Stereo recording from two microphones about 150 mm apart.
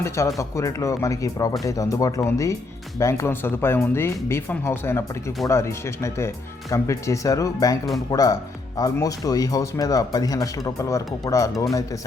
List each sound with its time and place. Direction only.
0.0 s speech: 20° left (ahead or behind)